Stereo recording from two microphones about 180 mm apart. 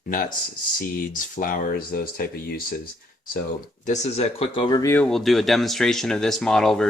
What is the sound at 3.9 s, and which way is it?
Speech, 35° left (ahead or behind).